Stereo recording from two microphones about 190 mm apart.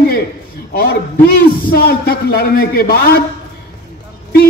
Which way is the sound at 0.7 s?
50° left (ahead or behind).